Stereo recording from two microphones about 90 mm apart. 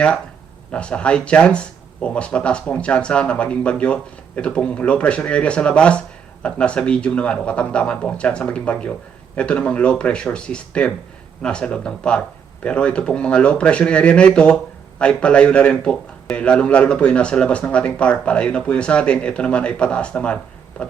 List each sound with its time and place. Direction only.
0.7 s speech: 10° left (ahead or behind)